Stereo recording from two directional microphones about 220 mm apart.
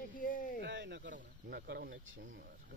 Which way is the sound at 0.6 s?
50° right (ahead or behind).